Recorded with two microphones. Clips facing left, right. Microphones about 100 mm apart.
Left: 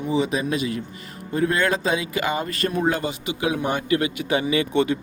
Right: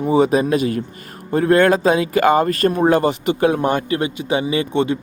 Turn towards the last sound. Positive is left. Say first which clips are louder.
# right 2 dB
turn(degrees=-25)  # may be behind; listen again after turning